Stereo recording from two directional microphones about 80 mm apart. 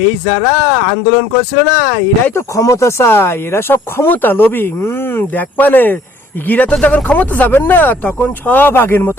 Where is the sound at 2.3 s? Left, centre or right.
Left.